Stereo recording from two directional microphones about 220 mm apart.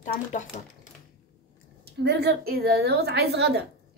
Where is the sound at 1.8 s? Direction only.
50° right (ahead or behind).